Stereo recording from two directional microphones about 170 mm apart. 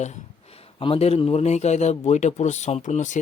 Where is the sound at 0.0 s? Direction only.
40° left (ahead or behind).